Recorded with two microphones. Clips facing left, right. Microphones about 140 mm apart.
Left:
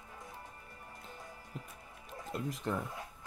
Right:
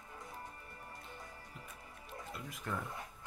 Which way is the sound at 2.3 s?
35° left (ahead or behind).